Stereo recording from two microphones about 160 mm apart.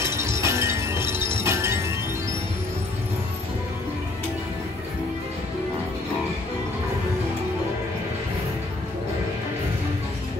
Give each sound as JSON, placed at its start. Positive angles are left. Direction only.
{"t": 0.0, "sound": "music", "side_deg": -15}